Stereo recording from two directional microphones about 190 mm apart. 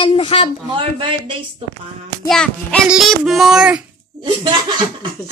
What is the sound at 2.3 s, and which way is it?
A woman's voice, 5° left (ahead or behind).